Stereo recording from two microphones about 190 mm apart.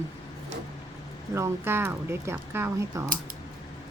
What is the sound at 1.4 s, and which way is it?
Speech, 10° right (ahead or behind).